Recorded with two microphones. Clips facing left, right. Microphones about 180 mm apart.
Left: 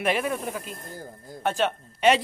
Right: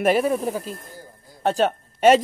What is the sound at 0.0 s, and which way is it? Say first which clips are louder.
Speech: right 6 dB; 40° right (ahead or behind).